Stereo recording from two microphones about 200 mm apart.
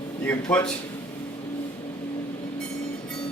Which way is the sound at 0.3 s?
10° left (ahead or behind).